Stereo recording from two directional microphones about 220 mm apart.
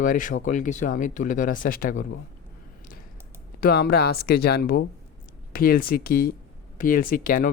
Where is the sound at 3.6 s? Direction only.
45° left (ahead or behind).